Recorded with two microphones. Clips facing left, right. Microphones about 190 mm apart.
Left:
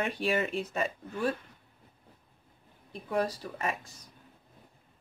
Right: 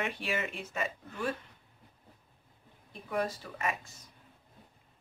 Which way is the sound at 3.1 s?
35° left (ahead or behind).